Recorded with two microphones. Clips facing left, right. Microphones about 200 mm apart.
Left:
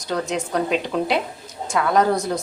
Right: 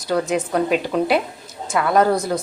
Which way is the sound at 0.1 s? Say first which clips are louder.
Right 4 dB; 5° right (ahead or behind).